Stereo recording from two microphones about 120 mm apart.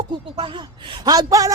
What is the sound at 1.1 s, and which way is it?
Speech, 30° right (ahead or behind).